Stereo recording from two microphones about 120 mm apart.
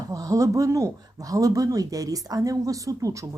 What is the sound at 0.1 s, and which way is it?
A woman's voice, 30° right (ahead or behind).